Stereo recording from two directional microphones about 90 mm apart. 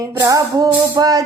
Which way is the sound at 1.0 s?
45° right (ahead or behind).